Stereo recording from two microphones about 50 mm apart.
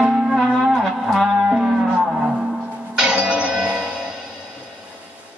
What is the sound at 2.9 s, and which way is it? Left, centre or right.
Music, centre.